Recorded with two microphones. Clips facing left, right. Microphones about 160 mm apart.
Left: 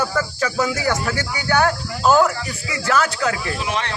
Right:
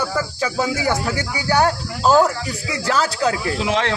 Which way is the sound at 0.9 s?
30° right (ahead or behind).